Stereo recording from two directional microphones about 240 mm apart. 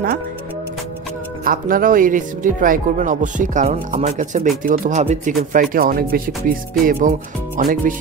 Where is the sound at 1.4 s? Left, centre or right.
Right.